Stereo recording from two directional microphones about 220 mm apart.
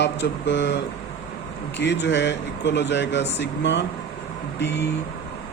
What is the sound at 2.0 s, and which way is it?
Speech, 55° left (ahead or behind).